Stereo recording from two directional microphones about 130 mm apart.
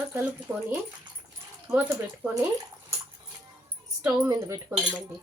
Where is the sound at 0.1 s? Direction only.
15° right (ahead or behind).